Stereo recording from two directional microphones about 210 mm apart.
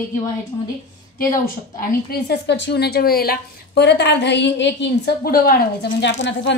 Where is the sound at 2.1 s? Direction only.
55° left (ahead or behind).